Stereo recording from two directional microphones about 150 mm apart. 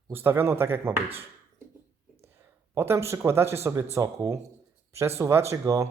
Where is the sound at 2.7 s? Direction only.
15° right (ahead or behind).